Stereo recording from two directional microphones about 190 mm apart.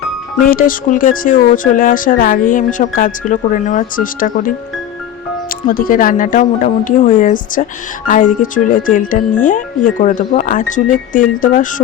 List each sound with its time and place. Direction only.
0.4 s speech: 50° left (ahead or behind)